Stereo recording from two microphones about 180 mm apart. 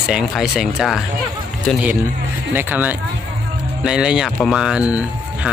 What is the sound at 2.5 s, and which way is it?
Speech, 10° right (ahead or behind).